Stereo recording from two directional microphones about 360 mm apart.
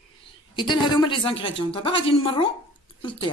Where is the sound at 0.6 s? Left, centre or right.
Centre.